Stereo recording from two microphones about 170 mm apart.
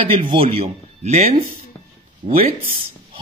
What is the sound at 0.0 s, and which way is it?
A man's voice, 30° right (ahead or behind).